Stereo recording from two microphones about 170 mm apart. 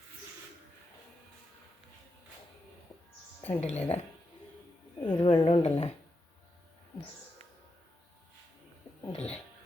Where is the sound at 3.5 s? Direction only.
40° left (ahead or behind).